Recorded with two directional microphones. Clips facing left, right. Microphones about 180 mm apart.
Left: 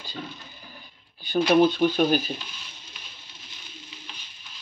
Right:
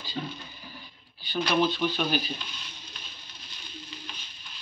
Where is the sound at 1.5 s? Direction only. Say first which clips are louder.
Left 7 dB; 50° left (ahead or behind).